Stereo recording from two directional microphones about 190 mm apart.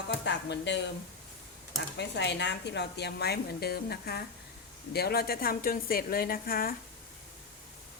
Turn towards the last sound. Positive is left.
turn(degrees=50)  # may be behind; listen again after turning